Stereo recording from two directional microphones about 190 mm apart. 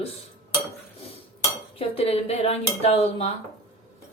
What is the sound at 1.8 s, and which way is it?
Speech, 30° left (ahead or behind).